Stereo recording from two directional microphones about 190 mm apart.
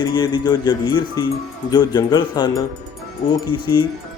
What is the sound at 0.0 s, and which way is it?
Speech, 20° left (ahead or behind).